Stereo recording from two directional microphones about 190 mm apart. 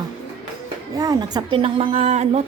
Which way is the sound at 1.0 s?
20° right (ahead or behind).